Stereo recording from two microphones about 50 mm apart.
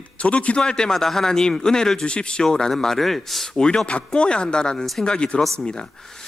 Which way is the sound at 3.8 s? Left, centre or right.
Centre.